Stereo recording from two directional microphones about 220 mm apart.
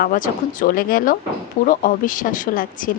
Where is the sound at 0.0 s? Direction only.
40° left (ahead or behind).